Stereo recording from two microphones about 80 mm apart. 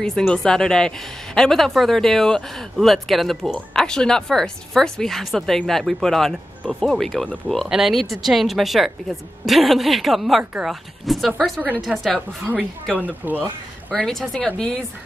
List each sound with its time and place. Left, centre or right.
0.3 s speech: centre
13.0 s speech: right
14.0 s speech: centre